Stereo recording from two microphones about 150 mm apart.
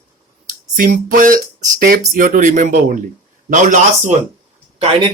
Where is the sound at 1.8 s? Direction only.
70° right (ahead or behind); by 4.2 s 55° right (ahead or behind).